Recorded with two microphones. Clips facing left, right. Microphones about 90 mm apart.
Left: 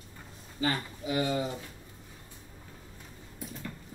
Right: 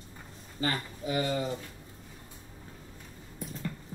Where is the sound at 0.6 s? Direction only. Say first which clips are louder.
Left 1 dB; 40° right (ahead or behind).